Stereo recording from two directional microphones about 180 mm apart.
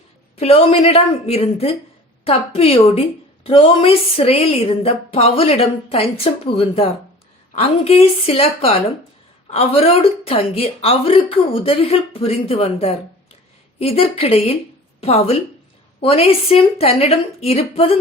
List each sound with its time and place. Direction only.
0.3 s speech: 35° left (ahead or behind)